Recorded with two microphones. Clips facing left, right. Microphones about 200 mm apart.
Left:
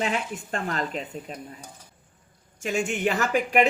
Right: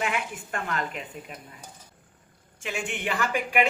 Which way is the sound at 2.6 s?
40° left (ahead or behind).